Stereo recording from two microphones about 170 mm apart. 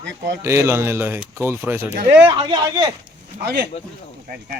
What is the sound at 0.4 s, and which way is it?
Speech, 15° right (ahead or behind).